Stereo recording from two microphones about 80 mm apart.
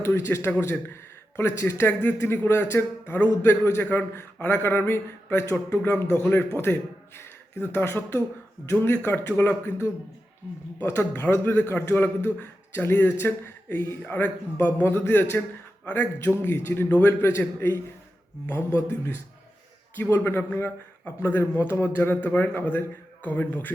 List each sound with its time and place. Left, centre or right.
0.0 s a man's voice: left
1.9 s a man's voice: centre
10.8 s a man's voice: left
16.4 s a man's voice: left
18.9 s a man's voice: left